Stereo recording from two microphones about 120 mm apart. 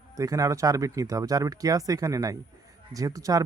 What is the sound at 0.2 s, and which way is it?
A man's voice, 30° right (ahead or behind).